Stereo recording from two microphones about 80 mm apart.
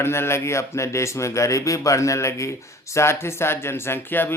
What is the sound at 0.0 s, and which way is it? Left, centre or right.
Speech, left.